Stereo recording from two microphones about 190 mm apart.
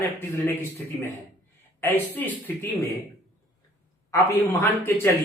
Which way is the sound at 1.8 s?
10° left (ahead or behind).